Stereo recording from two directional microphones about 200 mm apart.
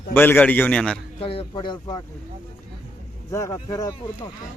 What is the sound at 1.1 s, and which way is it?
Speech, 30° left (ahead or behind).